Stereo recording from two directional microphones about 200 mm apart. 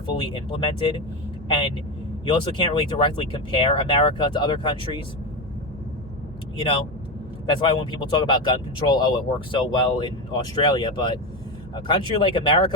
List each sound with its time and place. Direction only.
0.2 s speech: 25° left (ahead or behind)
7.4 s speech: 25° left (ahead or behind)